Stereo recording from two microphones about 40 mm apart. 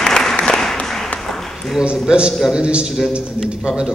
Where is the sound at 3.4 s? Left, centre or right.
Centre.